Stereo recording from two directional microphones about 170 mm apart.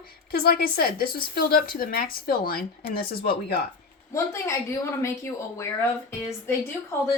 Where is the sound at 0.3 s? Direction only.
60° left (ahead or behind).